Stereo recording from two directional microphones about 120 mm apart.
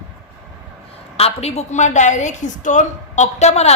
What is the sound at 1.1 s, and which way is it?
A woman's voice, 60° left (ahead or behind).